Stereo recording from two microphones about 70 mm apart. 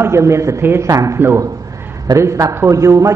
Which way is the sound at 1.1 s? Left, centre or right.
Right.